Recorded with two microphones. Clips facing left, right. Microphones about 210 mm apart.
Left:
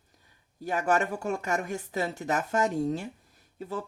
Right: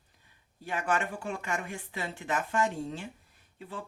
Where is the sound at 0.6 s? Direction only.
40° left (ahead or behind).